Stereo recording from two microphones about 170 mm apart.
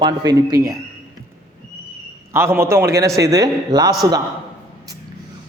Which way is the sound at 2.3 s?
15° right (ahead or behind).